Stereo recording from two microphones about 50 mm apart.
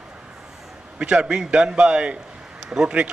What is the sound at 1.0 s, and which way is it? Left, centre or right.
A man's voice, centre.